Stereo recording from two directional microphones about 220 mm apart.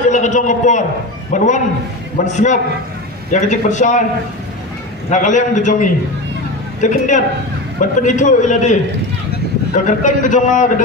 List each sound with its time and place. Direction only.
0.0 s a man's voice: 35° left (ahead or behind)
5.1 s a man's voice: 35° left (ahead or behind)
9.8 s a man's voice: 35° left (ahead or behind)